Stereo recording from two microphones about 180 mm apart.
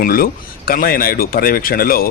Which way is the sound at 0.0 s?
50° left (ahead or behind).